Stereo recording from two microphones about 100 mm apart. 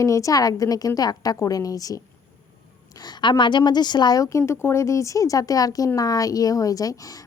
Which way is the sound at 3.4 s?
50° left (ahead or behind).